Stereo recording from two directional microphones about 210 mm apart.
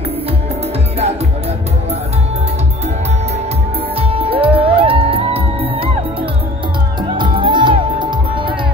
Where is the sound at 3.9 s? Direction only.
25° right (ahead or behind).